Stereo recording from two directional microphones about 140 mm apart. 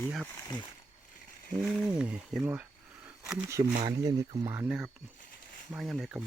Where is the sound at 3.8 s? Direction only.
25° right (ahead or behind).